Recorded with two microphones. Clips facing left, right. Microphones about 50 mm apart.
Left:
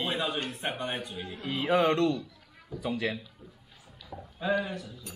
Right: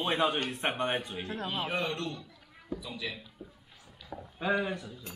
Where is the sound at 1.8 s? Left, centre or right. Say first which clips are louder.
Left 10 dB; left.